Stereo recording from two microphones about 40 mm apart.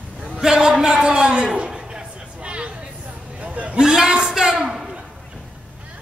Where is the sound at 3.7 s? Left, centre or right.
Centre.